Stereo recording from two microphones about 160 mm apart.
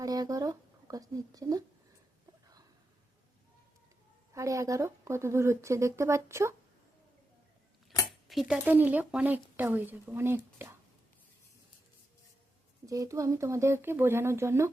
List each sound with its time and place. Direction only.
0.0 s a sound: 25° right (ahead or behind)
4.4 s speech: 20° right (ahead or behind)
8.3 s dishes: centre (ahead or behind)
8.5 s speech: 10° right (ahead or behind)
12.8 s speech: 20° right (ahead or behind)